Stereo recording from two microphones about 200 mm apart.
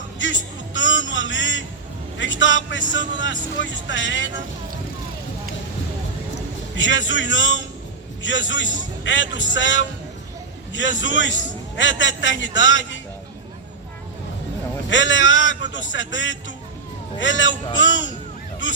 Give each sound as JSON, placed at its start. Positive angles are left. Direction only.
{"t": 0.2, "sound": "a sound", "side_deg": 70}
{"t": 2.1, "sound": "speech", "side_deg": 70}
{"t": 6.7, "sound": "speech", "side_deg": 70}
{"t": 14.8, "sound": "speech", "side_deg": 70}